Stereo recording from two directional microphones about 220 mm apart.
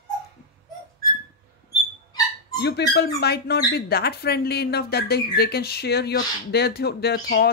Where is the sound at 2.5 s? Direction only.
50° left (ahead or behind).